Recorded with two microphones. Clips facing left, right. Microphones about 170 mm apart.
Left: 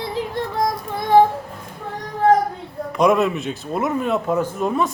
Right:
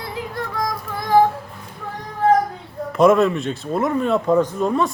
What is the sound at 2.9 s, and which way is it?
Speech, centre (ahead or behind).